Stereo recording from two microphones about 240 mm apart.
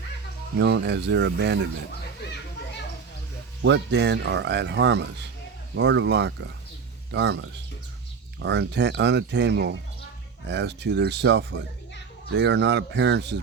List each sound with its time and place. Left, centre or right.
0.6 s speech: right
3.6 s speech: right